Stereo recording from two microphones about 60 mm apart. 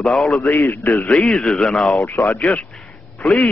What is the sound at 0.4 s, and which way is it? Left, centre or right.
Speech, left.